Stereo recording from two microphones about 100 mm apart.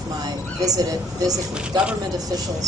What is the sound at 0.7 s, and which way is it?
Speech, 40° right (ahead or behind).